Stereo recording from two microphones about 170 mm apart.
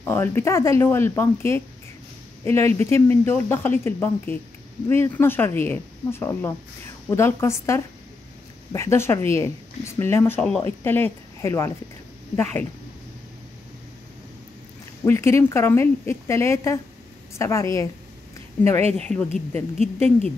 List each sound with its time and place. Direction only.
0.0 s speech: 15° left (ahead or behind)
15.0 s speech: 15° left (ahead or behind)
18.8 s speech: 40° right (ahead or behind)
19.0 s speech: 5° left (ahead or behind)